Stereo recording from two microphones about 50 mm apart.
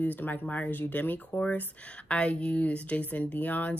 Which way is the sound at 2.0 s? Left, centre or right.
Left.